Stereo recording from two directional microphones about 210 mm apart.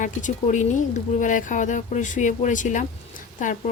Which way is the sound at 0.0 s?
35° left (ahead or behind).